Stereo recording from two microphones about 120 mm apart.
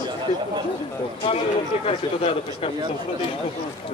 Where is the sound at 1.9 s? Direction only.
55° left (ahead or behind).